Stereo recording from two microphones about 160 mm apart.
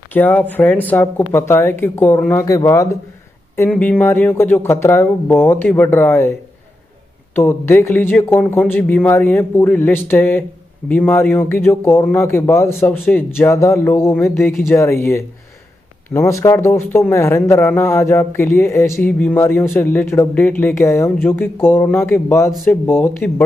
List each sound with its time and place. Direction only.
0.1 s speech: 10° left (ahead or behind)
7.3 s speech: 15° left (ahead or behind)